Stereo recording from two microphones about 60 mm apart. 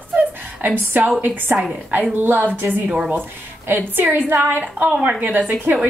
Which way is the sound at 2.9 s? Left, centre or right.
Centre.